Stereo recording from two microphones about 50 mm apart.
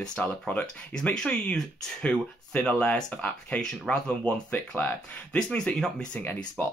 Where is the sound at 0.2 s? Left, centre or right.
Left.